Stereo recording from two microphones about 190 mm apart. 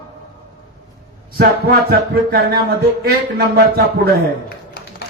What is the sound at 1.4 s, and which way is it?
Speech, 55° right (ahead or behind).